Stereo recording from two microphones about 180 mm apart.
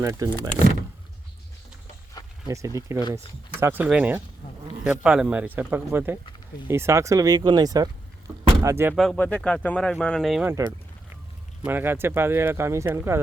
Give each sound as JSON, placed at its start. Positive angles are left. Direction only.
{"t": 0.0, "sound": "speech", "side_deg": -20}
{"t": 2.2, "sound": "a sound", "side_deg": 20}
{"t": 2.5, "sound": "speech", "side_deg": -15}
{"t": 9.0, "sound": "speech", "side_deg": 5}
{"t": 10.4, "sound": "speech", "side_deg": -15}